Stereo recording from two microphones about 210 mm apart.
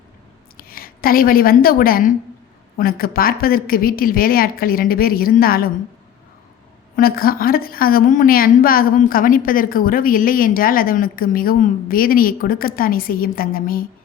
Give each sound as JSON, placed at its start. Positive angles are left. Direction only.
{"t": 0.5, "sound": "a woman's voice", "side_deg": 45}
{"t": 6.9, "sound": "a woman's voice", "side_deg": 45}